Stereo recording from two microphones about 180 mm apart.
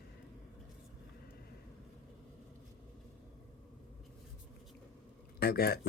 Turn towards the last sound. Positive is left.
turn(degrees=60)  # may be behind; listen again after turning